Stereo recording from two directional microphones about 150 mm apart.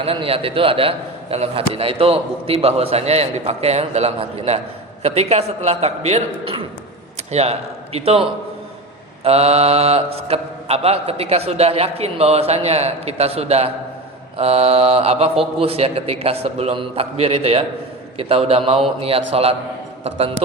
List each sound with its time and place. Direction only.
0.0 s a man's voice: 40° right (ahead or behind)
5.0 s mantra: 45° right (ahead or behind)
7.3 s speech: 45° right (ahead or behind)
9.2 s mantra: 45° right (ahead or behind)
14.3 s a man's voice: 40° right (ahead or behind)
20.1 s mantra: 40° right (ahead or behind)